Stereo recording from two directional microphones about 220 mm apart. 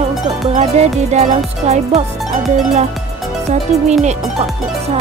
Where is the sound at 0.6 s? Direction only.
30° right (ahead or behind).